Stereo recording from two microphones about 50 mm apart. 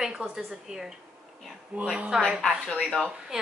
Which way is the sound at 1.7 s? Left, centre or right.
Right.